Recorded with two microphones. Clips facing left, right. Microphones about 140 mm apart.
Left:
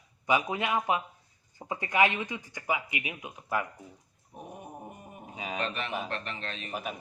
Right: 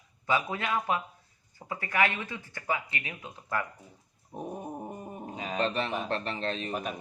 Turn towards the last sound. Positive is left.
turn(degrees=-35)  # may be behind; listen again after turning